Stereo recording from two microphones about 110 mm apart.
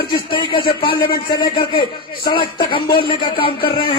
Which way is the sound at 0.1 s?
50° left (ahead or behind).